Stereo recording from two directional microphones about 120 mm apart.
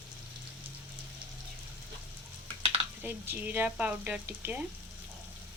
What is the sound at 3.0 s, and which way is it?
Speech, 20° right (ahead or behind).